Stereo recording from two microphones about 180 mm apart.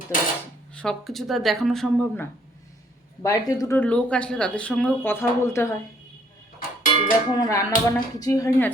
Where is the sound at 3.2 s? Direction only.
20° left (ahead or behind).